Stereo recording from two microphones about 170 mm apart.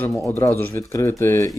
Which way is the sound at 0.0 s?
5° left (ahead or behind).